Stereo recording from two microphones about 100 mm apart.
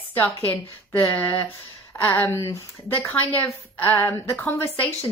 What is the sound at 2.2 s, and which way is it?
Speech, 30° left (ahead or behind).